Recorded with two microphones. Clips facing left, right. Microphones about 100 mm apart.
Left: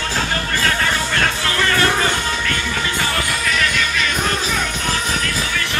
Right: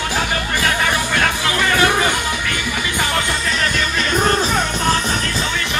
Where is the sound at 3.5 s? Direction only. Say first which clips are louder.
Left 1 dB; 35° right (ahead or behind).